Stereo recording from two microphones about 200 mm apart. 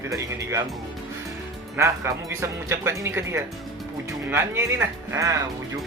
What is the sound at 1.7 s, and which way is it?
Speech, 15° right (ahead or behind).